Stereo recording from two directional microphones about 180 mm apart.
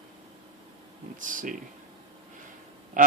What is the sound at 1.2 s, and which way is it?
Speech, 45° right (ahead or behind).